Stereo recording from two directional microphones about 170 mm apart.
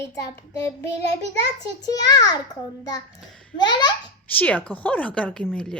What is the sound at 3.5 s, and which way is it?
Speech, 25° left (ahead or behind).